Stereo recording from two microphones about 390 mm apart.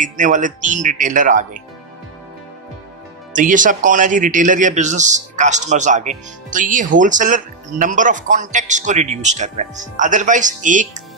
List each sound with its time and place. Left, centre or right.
0.0 s a man's voice: centre
3.3 s a man's voice: centre